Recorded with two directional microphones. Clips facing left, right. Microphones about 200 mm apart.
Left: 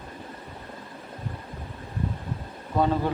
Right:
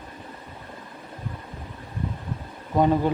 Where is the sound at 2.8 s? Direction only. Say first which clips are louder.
Right 4 dB; 15° right (ahead or behind).